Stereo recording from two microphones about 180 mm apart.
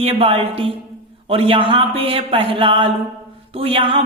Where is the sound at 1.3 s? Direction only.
30° right (ahead or behind).